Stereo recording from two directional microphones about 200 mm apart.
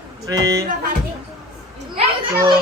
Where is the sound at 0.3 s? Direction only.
15° right (ahead or behind).